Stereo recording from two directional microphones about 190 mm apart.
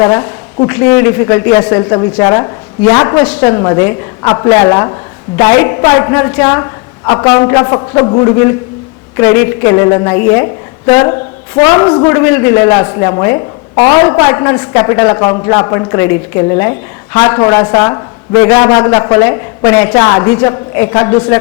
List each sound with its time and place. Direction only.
0.0 s a woman's voice: 20° left (ahead or behind)